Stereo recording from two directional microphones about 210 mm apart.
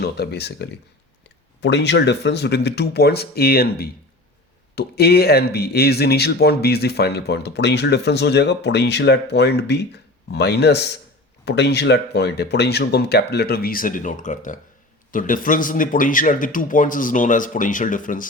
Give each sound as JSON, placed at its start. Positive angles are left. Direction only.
{"t": 0.0, "sound": "a man's voice", "side_deg": 50}